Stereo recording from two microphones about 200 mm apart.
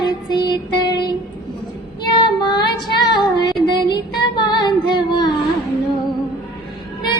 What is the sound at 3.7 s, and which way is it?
Female singing, 20° left (ahead or behind).